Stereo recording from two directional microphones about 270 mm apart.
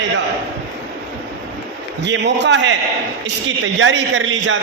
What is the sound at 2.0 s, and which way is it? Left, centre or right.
Speech, right.